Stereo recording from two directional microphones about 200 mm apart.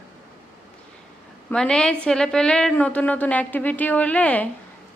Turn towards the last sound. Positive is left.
turn(degrees=5)  # may be behind; listen again after turning